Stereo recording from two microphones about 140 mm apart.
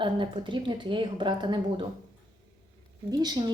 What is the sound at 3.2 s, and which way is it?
Speech, 30° right (ahead or behind).